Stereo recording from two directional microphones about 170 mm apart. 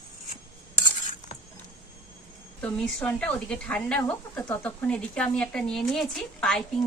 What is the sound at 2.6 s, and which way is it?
Speech, 10° left (ahead or behind).